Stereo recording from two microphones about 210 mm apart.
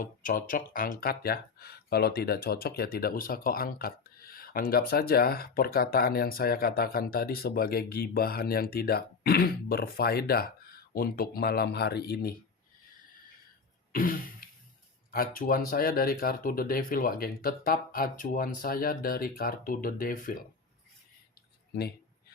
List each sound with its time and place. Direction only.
0.0 s speech: 40° left (ahead or behind)
13.9 s a sound: 40° left (ahead or behind)
15.1 s speech: 45° left (ahead or behind)